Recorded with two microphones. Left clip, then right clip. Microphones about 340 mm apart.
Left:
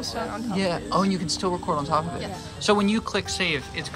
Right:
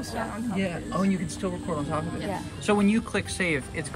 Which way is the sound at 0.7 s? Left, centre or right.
Centre.